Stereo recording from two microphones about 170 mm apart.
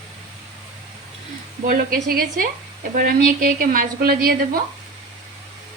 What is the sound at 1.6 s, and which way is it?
A woman's voice, 55° right (ahead or behind).